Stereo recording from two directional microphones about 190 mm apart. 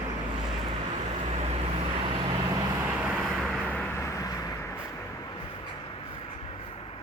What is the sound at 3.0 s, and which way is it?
Vehicle, 5° right (ahead or behind).